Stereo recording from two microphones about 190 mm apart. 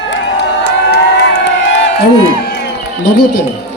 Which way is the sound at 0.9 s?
60° left (ahead or behind).